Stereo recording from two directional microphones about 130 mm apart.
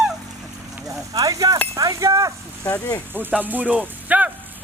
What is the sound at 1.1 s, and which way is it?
Speech, 25° right (ahead or behind).